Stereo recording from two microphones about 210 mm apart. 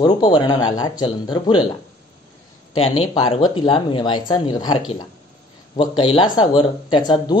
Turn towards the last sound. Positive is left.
turn(degrees=20)  # may be behind; listen again after turning